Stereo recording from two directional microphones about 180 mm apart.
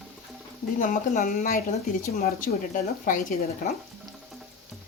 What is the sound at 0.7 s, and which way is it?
Speech, 45° left (ahead or behind).